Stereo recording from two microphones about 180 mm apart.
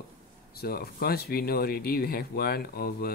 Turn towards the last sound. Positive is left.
turn(degrees=55)  # may be behind; listen again after turning